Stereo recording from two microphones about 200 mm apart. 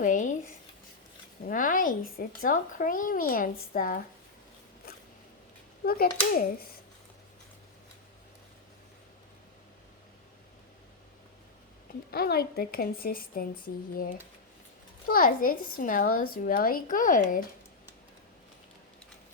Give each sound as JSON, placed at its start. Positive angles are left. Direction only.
{"t": 0.0, "sound": "a sound", "side_deg": 40}
{"t": 1.5, "sound": "speech", "side_deg": 45}
{"t": 5.8, "sound": "speech", "side_deg": 45}
{"t": 11.9, "sound": "speech", "side_deg": 50}